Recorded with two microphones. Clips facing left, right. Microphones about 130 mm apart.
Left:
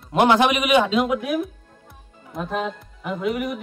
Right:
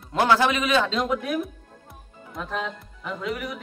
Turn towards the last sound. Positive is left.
turn(degrees=20)  # may be behind; listen again after turning